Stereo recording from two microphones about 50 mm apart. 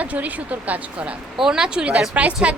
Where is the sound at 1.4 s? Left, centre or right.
Centre.